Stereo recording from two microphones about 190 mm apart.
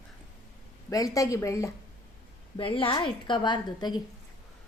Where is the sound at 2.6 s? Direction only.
25° left (ahead or behind).